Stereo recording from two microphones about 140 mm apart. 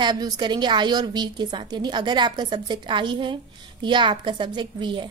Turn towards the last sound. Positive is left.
turn(degrees=-35)  # may be behind; listen again after turning